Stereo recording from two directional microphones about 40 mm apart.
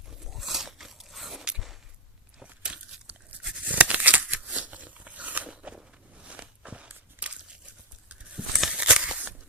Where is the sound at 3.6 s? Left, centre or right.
Right.